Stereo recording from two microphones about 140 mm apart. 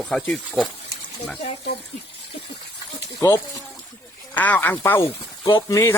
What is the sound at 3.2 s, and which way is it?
Speech, 20° left (ahead or behind).